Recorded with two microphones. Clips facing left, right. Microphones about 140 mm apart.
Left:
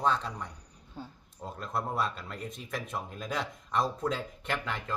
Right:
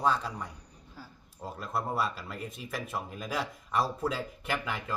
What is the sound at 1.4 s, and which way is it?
Speech, 5° right (ahead or behind).